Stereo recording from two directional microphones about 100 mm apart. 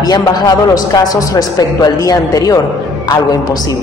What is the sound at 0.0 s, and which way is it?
A man's voice, 40° left (ahead or behind).